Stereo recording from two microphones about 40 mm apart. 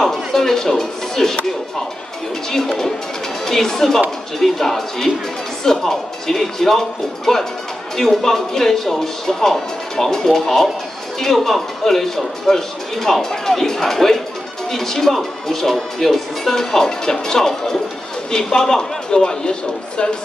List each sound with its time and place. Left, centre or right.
0.0 s speech: centre
2.5 s speech: centre